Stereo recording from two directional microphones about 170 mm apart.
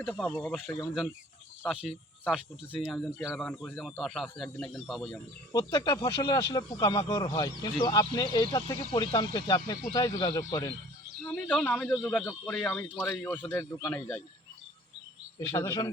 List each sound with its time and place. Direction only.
0.0 s speech: 10° left (ahead or behind)
0.5 s a man's voice: centre (ahead or behind)
5.5 s speech: 25° left (ahead or behind)
11.4 s speech: 10° left (ahead or behind)
15.4 s speech: 20° left (ahead or behind)